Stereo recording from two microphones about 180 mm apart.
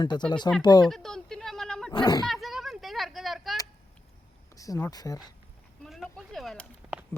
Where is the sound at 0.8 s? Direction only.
Centre (ahead or behind).